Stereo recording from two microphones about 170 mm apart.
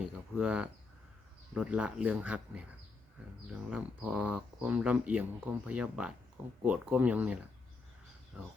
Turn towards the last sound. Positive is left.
turn(degrees=-10)  # may be behind; listen again after turning